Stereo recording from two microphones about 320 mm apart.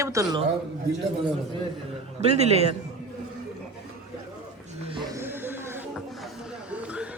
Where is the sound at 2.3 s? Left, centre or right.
Centre.